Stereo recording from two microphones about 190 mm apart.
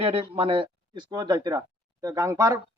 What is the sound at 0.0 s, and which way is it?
Speech, 30° right (ahead or behind).